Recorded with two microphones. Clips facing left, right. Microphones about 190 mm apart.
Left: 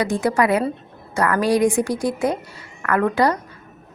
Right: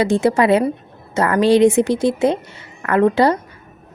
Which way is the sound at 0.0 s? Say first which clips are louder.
Right 4 dB; 25° right (ahead or behind).